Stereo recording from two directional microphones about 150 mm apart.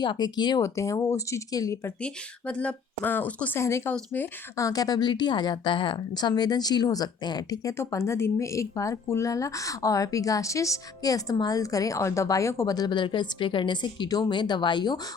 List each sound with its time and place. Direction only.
0.0 s speech: 30° left (ahead or behind)
2.0 s speech: 5° left (ahead or behind); by 15.0 s 30° left (ahead or behind)